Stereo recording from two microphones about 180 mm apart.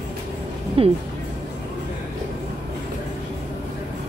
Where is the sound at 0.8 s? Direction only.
30° right (ahead or behind).